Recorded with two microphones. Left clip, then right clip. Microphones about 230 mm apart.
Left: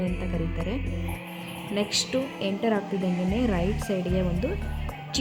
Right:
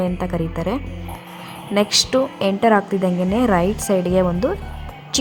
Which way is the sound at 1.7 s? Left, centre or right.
Right.